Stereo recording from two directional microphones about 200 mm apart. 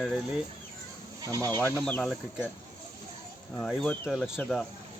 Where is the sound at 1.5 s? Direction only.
10° left (ahead or behind).